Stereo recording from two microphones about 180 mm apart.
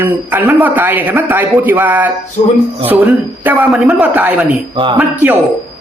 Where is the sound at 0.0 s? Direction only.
10° right (ahead or behind).